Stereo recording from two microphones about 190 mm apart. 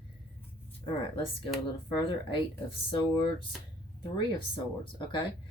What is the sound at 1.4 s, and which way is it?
Speech, 25° left (ahead or behind).